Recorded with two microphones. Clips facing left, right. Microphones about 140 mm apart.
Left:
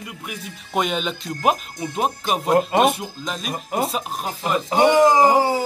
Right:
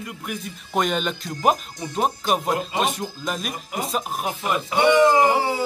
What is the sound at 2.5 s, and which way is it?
Speech, 55° left (ahead or behind).